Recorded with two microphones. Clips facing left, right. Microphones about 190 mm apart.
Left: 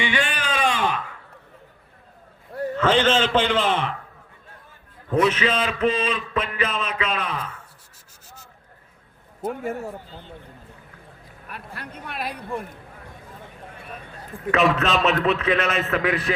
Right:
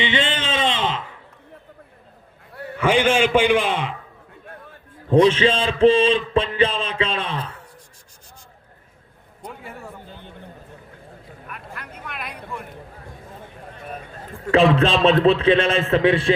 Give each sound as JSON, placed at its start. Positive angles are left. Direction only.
{"t": 0.0, "sound": "a sound", "side_deg": -25}
{"t": 2.7, "sound": "a man's voice", "side_deg": -10}
{"t": 5.0, "sound": "a man's voice", "side_deg": -30}
{"t": 9.5, "sound": "a man's voice", "side_deg": 45}
{"t": 10.1, "sound": "speech", "side_deg": -60}
{"t": 11.4, "sound": "speech", "side_deg": 35}
{"t": 14.5, "sound": "a man's voice", "side_deg": -30}